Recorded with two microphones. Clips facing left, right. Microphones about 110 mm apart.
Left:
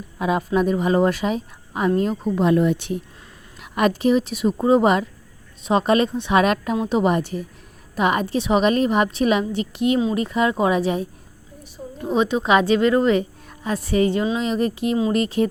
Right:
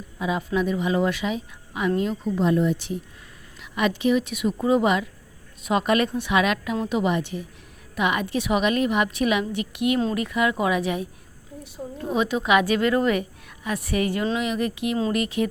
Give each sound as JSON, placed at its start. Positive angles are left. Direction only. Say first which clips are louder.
{"t": 0.2, "sound": "a woman's voice", "louder": "left 4 dB", "side_deg": 50}
{"t": 2.3, "sound": "a woman's voice", "louder": "left 3 dB", "side_deg": 70}
{"t": 3.6, "sound": "a woman's voice", "louder": "left 4 dB", "side_deg": 45}
{"t": 6.4, "sound": "a woman's voice", "louder": "left 4 dB", "side_deg": 40}